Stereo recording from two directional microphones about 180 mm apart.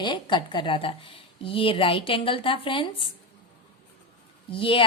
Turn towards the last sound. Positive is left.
turn(degrees=30)  # may be behind; listen again after turning